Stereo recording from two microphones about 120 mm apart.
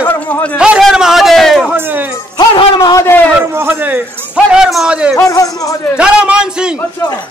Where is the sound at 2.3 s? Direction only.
35° left (ahead or behind).